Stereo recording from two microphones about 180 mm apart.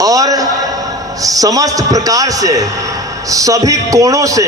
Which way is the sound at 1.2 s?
20° right (ahead or behind).